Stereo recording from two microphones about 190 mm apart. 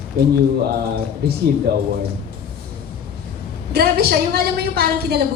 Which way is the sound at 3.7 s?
55° right (ahead or behind).